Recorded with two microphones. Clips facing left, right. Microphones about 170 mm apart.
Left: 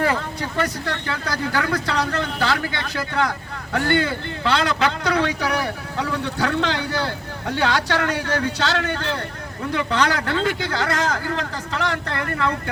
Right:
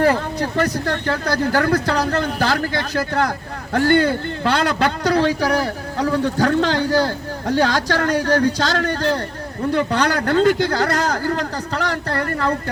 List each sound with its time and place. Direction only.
0.0 s speech: 40° right (ahead or behind)
5.0 s a man's voice: 40° right (ahead or behind)